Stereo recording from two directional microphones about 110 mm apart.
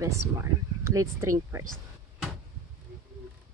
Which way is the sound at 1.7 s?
Centre (ahead or behind).